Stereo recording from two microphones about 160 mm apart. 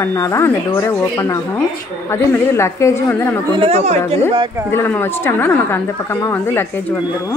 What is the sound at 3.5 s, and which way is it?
Speech, 35° right (ahead or behind).